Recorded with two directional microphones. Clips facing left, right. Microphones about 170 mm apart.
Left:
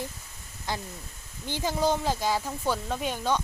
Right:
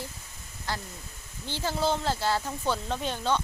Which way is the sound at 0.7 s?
20° left (ahead or behind).